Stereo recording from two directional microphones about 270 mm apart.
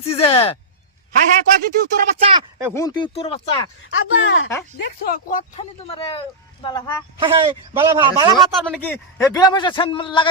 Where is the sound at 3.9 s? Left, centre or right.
Left.